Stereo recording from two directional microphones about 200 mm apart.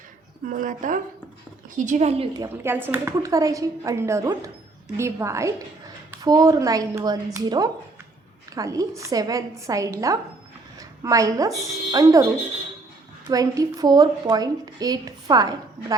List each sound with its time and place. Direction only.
0.4 s a woman's voice: 40° right (ahead or behind)
2.6 s a woman's voice: 10° right (ahead or behind)
13.2 s a woman's voice: 15° right (ahead or behind)